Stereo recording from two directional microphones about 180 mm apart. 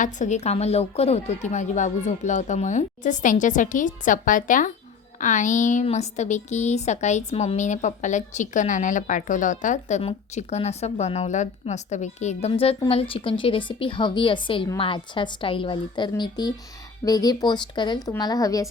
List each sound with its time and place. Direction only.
0.0 s a woman's voice: 40° left (ahead or behind); by 18.7 s 20° left (ahead or behind)